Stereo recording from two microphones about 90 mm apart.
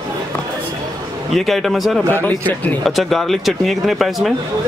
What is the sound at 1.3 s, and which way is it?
Speech, centre (ahead or behind).